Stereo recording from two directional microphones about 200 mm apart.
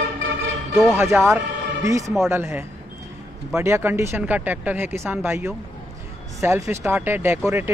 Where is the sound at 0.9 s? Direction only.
10° right (ahead or behind).